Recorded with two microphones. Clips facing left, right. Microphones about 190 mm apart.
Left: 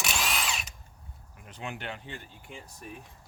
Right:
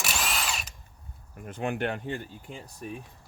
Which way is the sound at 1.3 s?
50° right (ahead or behind).